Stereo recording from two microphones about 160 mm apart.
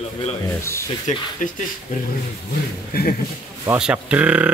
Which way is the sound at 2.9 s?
70° left (ahead or behind).